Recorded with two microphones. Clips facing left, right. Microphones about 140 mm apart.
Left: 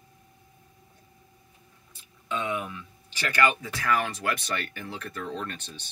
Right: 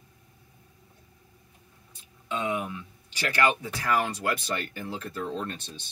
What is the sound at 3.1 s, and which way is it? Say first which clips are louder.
Speech: even; 10° right (ahead or behind).